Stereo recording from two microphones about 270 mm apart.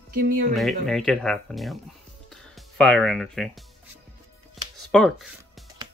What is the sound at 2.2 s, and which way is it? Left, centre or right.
Music, centre.